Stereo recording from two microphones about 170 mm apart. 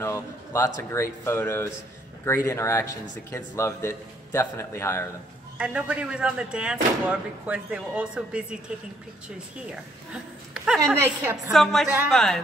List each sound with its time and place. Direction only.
0.0 s speech: 15° left (ahead or behind)
5.6 s speech: 5° right (ahead or behind)
10.8 s speech: 15° right (ahead or behind)
11.5 s a woman's voice: centre (ahead or behind)